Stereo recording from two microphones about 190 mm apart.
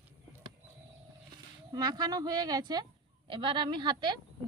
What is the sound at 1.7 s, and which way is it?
A woman's voice, 20° right (ahead or behind).